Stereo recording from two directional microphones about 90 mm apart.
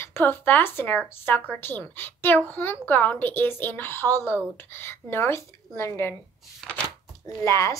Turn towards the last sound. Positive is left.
turn(degrees=35)  # may be behind; listen again after turning